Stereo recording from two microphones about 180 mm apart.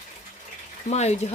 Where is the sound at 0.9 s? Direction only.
35° left (ahead or behind).